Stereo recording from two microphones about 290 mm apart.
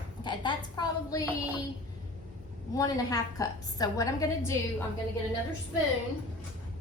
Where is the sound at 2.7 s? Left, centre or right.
Centre.